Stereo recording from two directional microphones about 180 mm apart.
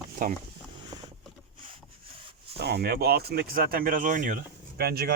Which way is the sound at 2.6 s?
65° right (ahead or behind).